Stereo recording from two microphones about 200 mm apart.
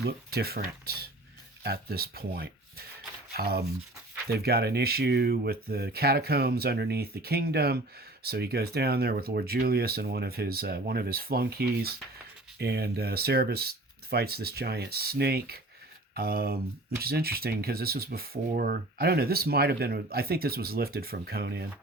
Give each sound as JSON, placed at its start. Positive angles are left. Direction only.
{"t": 0.0, "sound": "speech", "side_deg": -50}